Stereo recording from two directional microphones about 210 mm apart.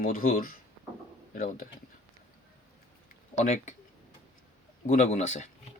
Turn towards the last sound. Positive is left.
turn(degrees=35)  # may be behind; listen again after turning